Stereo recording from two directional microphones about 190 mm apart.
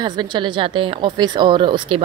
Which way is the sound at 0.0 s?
25° right (ahead or behind).